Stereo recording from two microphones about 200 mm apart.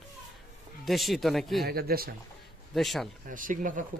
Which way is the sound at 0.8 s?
Centre (ahead or behind).